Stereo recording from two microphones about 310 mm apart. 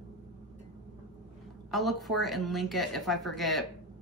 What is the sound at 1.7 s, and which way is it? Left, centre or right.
A woman's voice, centre.